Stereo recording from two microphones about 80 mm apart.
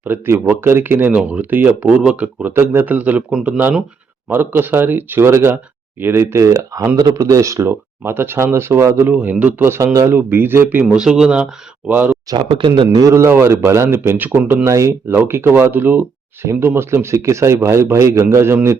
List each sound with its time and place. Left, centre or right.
0.1 s speech: right
2.5 s speech: right
3.3 s speech: centre
4.3 s speech: right
9.1 s speech: centre; by 10.2 s right
10.2 s speech: right
10.8 s speech: centre
11.9 s speech: right
12.3 s speech: right
13.0 s speech: right
14.7 s speech: right